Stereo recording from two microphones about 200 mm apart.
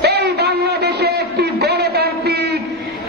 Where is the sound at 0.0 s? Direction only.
55° right (ahead or behind).